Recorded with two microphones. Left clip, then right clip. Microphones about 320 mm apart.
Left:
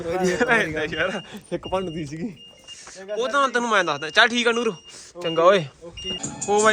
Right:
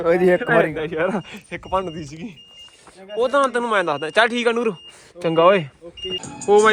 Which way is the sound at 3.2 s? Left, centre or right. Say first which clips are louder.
Right 3 dB; centre.